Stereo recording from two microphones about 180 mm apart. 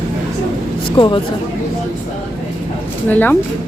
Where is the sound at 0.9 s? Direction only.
25° left (ahead or behind).